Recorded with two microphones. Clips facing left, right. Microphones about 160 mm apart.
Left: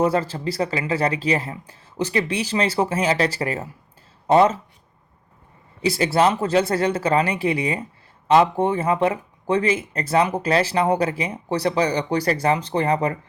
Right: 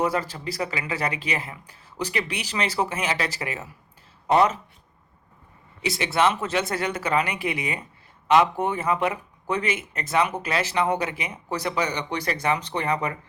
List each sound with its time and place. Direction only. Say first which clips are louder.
0.0 s speech: left 5 dB; 30° left (ahead or behind)
5.8 s speech: left 4 dB; 35° left (ahead or behind)